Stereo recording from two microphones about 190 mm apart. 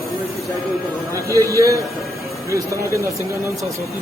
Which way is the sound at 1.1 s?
15° right (ahead or behind).